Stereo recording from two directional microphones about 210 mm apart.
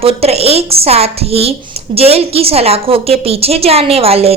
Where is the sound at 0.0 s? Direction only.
30° right (ahead or behind).